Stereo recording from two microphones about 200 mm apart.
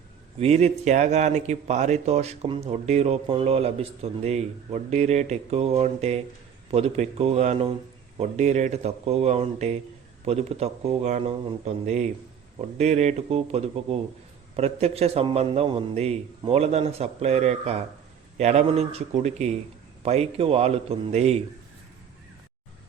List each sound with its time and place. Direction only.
0.3 s speech: 30° right (ahead or behind)